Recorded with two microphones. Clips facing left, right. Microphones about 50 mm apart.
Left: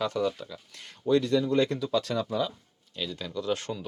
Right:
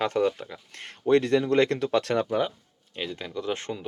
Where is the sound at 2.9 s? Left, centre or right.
Right.